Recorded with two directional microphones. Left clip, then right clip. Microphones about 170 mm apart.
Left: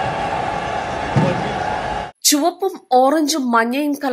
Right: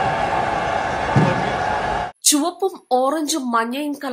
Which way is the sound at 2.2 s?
15° left (ahead or behind).